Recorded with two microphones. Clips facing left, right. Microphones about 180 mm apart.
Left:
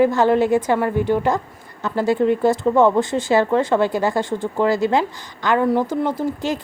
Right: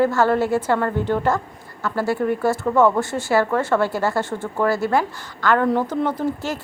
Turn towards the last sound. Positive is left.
turn(degrees=15)  # may be behind; listen again after turning